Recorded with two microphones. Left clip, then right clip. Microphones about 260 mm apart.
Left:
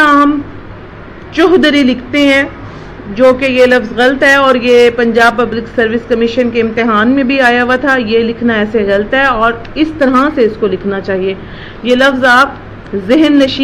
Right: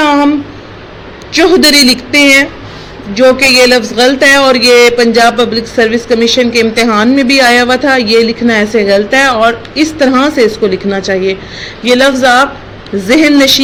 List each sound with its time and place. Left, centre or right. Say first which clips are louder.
1.3 s a man's voice: right 2 dB; right